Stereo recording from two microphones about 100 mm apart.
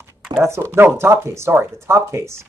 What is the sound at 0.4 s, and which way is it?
Speech, 25° right (ahead or behind).